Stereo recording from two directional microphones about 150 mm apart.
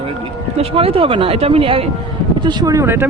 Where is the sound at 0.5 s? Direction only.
40° right (ahead or behind).